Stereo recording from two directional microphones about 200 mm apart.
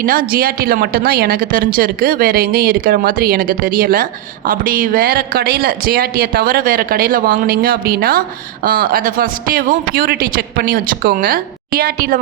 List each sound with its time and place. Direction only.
0.0 s a woman's voice: 45° right (ahead or behind)